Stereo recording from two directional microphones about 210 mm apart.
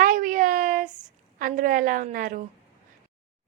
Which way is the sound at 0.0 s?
40° right (ahead or behind).